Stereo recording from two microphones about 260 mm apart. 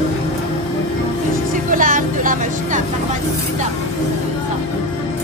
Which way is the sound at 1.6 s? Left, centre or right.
Right.